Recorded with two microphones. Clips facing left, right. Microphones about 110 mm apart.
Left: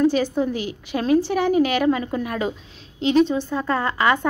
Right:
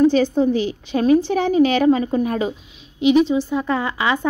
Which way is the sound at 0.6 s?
25° right (ahead or behind).